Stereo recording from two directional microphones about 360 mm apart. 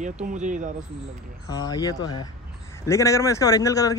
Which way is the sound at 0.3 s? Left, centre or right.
Right.